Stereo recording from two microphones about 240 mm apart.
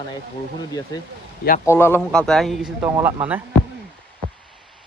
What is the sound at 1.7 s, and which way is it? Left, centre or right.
Speech, centre.